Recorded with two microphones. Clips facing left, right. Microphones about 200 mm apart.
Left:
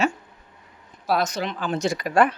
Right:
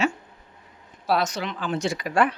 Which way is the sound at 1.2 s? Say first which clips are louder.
Left 1 dB; 40° left (ahead or behind).